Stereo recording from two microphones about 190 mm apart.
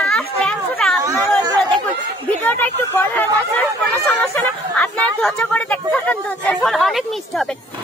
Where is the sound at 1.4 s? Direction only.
20° right (ahead or behind).